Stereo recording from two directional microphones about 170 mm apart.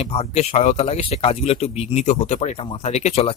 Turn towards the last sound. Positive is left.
turn(degrees=40)  # may be behind; listen again after turning